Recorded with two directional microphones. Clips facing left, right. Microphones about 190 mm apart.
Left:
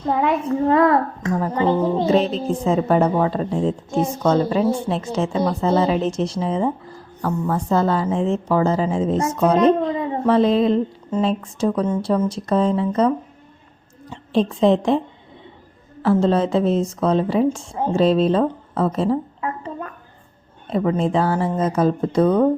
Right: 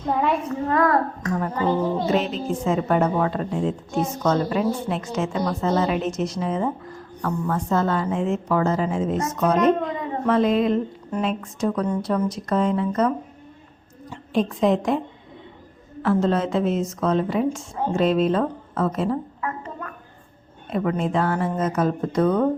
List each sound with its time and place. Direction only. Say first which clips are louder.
0.0 s a child's voice: left 3 dB; centre (ahead or behind)
0.4 s a child's voice: left 5 dB; 25° left (ahead or behind)
14.1 s a woman's voice: left 3 dB; 30° left (ahead or behind)
16.0 s a woman's voice: left 4 dB; 30° left (ahead or behind)